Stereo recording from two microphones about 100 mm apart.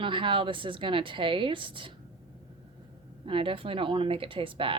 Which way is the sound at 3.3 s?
60° right (ahead or behind).